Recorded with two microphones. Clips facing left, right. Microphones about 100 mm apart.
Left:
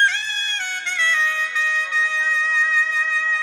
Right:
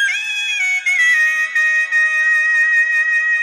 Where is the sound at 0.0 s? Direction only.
40° left (ahead or behind).